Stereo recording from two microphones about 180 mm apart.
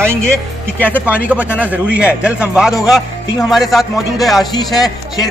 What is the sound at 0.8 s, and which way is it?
A man's voice, 10° right (ahead or behind).